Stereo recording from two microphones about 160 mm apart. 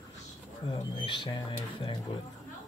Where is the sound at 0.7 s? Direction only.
30° left (ahead or behind).